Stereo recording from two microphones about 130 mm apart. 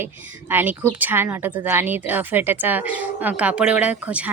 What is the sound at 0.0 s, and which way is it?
A woman's voice, 15° right (ahead or behind).